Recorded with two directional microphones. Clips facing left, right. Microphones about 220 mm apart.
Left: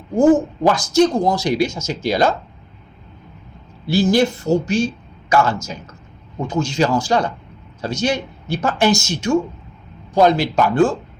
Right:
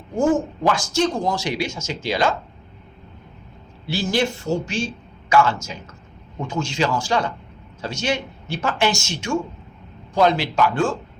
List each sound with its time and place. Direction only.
0.2 s speech: 40° left (ahead or behind)
3.9 s speech: 40° left (ahead or behind)